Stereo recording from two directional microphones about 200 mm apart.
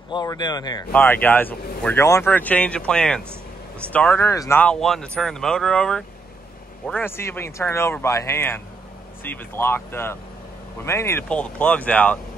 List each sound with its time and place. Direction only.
0.1 s speech: 20° left (ahead or behind)